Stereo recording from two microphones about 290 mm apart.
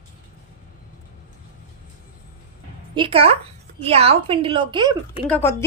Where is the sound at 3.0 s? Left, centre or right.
Centre.